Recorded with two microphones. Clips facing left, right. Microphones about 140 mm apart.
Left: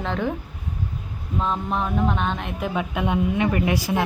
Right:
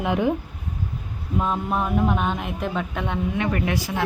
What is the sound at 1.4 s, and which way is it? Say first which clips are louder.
Speech: right 1 dB; 5° right (ahead or behind).